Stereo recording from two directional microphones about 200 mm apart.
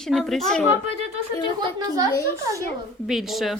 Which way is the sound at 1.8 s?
20° right (ahead or behind).